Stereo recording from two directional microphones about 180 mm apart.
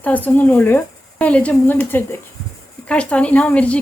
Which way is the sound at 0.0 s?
10° left (ahead or behind).